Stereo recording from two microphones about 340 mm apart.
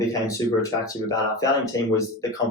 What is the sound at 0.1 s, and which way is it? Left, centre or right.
Speech, centre.